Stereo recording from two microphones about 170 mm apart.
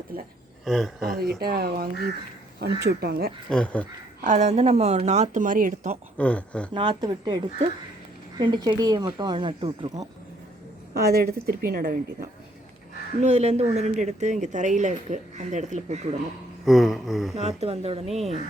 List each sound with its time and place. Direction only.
0.6 s speech: centre (ahead or behind)
1.5 s speech: 60° right (ahead or behind)
3.5 s speech: 5° left (ahead or behind)
4.2 s speech: 45° right (ahead or behind)
6.1 s speech: 10° left (ahead or behind)
6.7 s speech: 25° right (ahead or behind)
10.9 s speech: 65° right (ahead or behind)
13.1 s speech: 40° right (ahead or behind)
16.6 s speech: centre (ahead or behind)
17.3 s speech: 40° right (ahead or behind)